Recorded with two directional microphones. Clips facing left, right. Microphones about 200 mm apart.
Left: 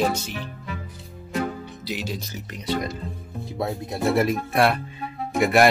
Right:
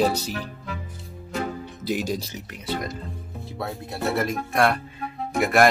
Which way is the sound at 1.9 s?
45° right (ahead or behind).